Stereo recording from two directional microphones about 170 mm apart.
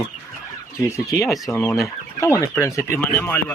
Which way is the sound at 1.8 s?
15° left (ahead or behind).